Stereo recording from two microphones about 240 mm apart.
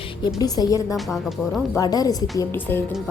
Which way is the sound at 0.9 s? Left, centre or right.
Centre.